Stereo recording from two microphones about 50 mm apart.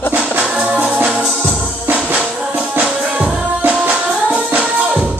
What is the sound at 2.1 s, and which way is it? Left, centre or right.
Music, right.